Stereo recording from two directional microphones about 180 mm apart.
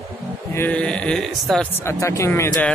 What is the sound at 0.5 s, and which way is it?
Speech, 10° left (ahead or behind).